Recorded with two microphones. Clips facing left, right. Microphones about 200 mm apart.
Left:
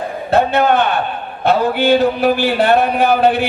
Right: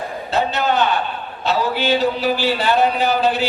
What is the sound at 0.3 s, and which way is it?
Speech, 55° left (ahead or behind).